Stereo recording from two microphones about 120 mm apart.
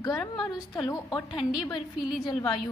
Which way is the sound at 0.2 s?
Centre (ahead or behind).